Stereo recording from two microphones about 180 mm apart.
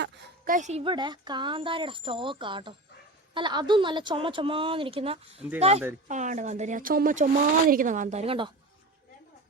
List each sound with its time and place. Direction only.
0.4 s speech: 45° right (ahead or behind)
0.9 s a woman's voice: 25° right (ahead or behind)